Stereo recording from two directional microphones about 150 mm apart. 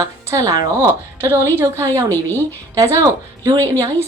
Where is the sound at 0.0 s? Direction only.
20° right (ahead or behind).